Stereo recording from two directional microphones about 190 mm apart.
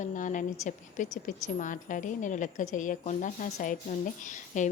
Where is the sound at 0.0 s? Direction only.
40° left (ahead or behind).